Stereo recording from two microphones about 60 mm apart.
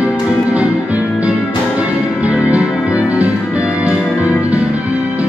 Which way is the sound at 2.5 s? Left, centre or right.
Right.